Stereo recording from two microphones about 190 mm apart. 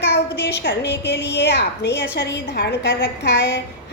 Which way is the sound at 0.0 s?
65° left (ahead or behind).